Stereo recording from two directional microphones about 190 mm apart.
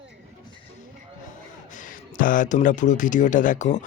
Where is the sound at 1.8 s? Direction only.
45° left (ahead or behind).